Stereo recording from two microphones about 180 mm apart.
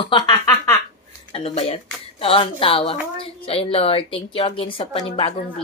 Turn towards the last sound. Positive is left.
turn(degrees=35)  # may be behind; listen again after turning